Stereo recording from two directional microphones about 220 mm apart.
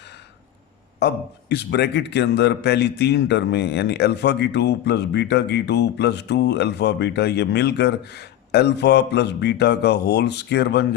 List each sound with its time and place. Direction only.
0.9 s a man's voice: 50° left (ahead or behind)